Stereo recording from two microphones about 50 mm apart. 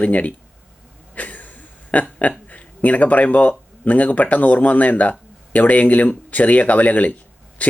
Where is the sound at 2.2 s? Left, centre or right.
Left.